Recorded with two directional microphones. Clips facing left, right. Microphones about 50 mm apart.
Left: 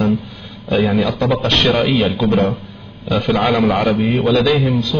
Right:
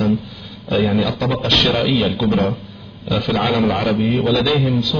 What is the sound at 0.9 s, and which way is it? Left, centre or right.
A man's voice, left.